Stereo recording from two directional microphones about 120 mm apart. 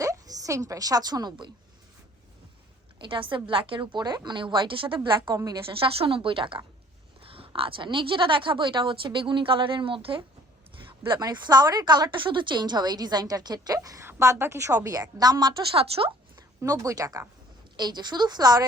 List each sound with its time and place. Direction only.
0.0 s a woman's voice: 30° right (ahead or behind)
3.0 s a woman's voice: 45° right (ahead or behind)
5.3 s a woman's voice: 30° right (ahead or behind)
5.8 s a woman's voice: 50° right (ahead or behind)
11.1 s a woman's voice: 35° right (ahead or behind)
15.2 s a woman's voice: 35° right (ahead or behind)
15.7 s a woman's voice: 50° right (ahead or behind)
16.6 s a woman's voice: 30° right (ahead or behind)